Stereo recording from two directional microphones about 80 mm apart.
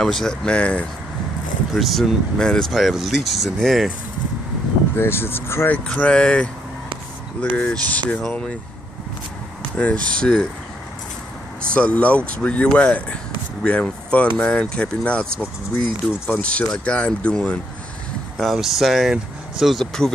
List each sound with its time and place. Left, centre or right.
0.0 s speech: centre
1.7 s speech: centre
4.9 s speech: left
5.7 s speech: centre
9.8 s speech: centre
11.7 s speech: centre
18.4 s speech: centre